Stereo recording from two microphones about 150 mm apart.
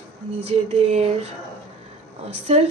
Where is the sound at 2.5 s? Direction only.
45° right (ahead or behind).